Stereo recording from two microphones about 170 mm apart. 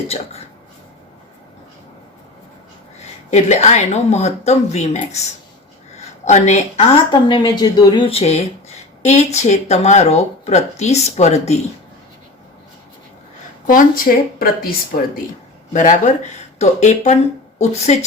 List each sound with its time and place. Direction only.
3.2 s speech: 40° left (ahead or behind)
6.2 s speech: 45° left (ahead or behind)
7.1 s speech: 25° left (ahead or behind)
13.7 s speech: 55° left (ahead or behind)